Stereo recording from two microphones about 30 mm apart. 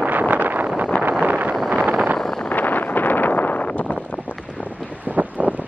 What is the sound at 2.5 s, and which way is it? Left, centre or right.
Wind noise, left.